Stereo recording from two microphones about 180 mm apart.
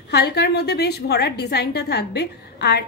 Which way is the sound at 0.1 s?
65° left (ahead or behind).